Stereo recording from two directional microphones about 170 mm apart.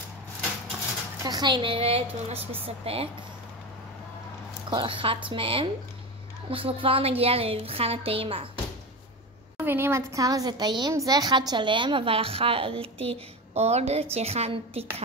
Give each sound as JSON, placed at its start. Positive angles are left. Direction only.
{"t": 1.2, "sound": "a woman's voice", "side_deg": -25}
{"t": 4.6, "sound": "a woman's voice", "side_deg": -30}
{"t": 9.6, "sound": "a woman's voice", "side_deg": -15}